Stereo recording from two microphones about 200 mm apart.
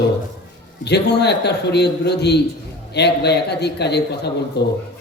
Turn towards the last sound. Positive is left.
turn(degrees=55)  # may be behind; listen again after turning